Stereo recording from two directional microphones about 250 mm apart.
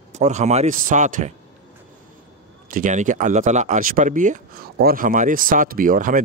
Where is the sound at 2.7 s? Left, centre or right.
Right.